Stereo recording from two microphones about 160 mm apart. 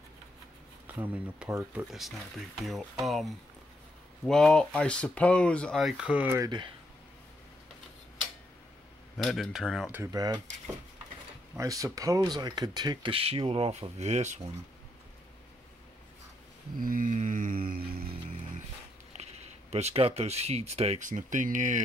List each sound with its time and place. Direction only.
0.8 s speech: 10° right (ahead or behind)
6.3 s speech: 25° right (ahead or behind)
9.1 s speech: centre (ahead or behind)
10.1 s speech: 25° right (ahead or behind)
11.5 s speech: 20° right (ahead or behind); by 14.4 s 45° right (ahead or behind)
16.8 s a sound: 60° right (ahead or behind)
19.1 s speech: 45° right (ahead or behind)